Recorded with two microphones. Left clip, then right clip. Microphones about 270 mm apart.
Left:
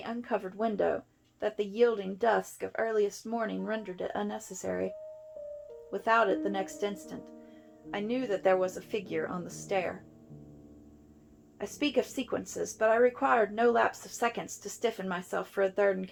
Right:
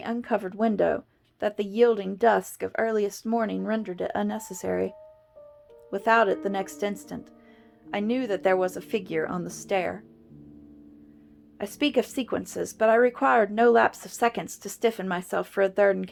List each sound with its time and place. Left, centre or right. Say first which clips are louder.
0.0 s speech: right 6 dB; right
5.9 s speech: right 5 dB; right
11.5 s speech: right 5 dB; right